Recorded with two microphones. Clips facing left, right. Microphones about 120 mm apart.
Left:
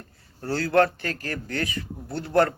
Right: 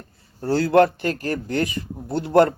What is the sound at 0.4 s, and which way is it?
Speech, 20° right (ahead or behind).